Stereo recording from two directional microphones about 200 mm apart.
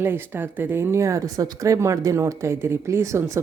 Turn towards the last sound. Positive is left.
turn(degrees=-15)  # may be behind; listen again after turning